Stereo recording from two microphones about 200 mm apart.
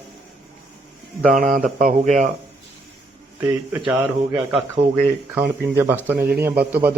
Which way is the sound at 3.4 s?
10° right (ahead or behind).